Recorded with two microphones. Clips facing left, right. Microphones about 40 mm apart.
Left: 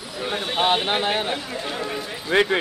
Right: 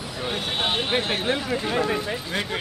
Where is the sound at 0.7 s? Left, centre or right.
Left.